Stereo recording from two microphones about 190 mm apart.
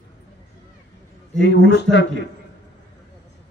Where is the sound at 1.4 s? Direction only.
70° left (ahead or behind).